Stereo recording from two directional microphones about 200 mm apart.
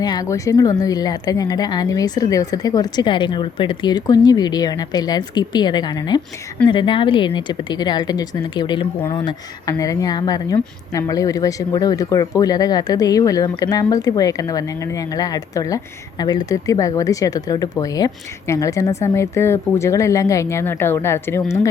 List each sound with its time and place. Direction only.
0.0 s a woman's voice: 20° left (ahead or behind)